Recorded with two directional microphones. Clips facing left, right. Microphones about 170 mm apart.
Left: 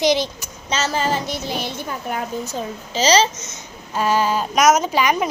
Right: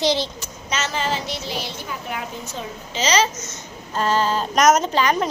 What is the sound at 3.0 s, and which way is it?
Speech, 35° left (ahead or behind).